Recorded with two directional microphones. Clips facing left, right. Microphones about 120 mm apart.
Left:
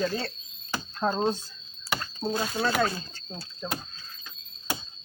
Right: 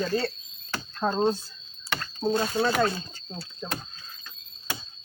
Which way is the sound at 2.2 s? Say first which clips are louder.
Right 3 dB; centre (ahead or behind).